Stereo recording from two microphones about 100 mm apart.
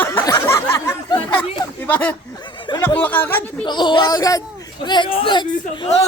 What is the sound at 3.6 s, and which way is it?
Speech, 50° left (ahead or behind).